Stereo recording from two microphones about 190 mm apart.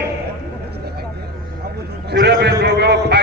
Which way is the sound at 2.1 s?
60° right (ahead or behind).